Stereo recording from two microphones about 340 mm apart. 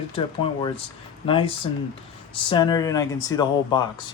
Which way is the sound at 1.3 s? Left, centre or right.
Centre.